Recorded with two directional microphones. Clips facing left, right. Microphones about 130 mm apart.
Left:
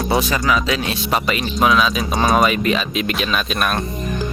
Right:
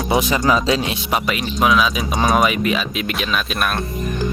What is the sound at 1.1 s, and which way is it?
Speech, 5° right (ahead or behind).